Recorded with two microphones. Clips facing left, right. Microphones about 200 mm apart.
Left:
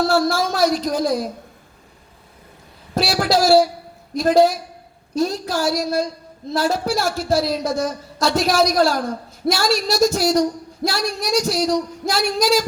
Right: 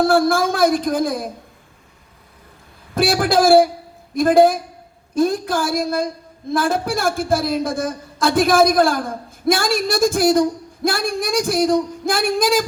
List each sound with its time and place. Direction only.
0.0 s a woman's voice: 50° right (ahead or behind)
2.9 s a woman's voice: 50° right (ahead or behind)